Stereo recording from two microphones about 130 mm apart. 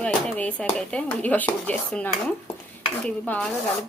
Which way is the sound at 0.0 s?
10° left (ahead or behind).